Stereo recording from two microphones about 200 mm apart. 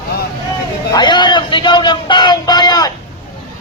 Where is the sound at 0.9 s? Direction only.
20° left (ahead or behind).